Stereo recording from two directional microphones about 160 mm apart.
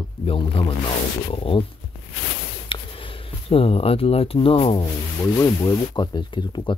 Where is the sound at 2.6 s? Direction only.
30° left (ahead or behind).